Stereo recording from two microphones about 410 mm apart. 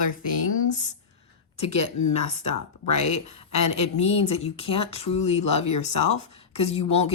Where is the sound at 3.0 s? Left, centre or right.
Centre.